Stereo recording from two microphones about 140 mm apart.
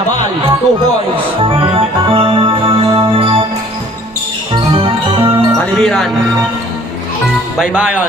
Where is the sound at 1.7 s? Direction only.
40° right (ahead or behind).